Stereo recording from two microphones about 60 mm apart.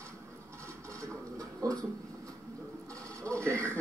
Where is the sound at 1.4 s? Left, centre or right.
Right.